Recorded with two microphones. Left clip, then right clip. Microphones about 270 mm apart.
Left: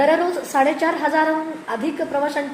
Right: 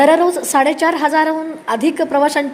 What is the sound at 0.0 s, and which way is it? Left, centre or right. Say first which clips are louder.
A woman's voice: right 6 dB; right.